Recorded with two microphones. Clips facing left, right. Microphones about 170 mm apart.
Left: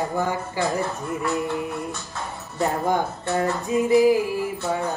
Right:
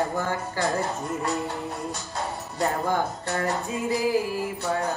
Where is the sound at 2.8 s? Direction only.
20° left (ahead or behind).